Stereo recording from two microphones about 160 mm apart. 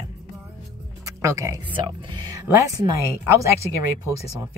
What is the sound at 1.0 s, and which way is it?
Music, 20° right (ahead or behind).